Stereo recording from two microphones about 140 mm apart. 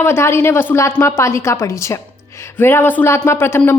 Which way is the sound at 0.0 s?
20° left (ahead or behind).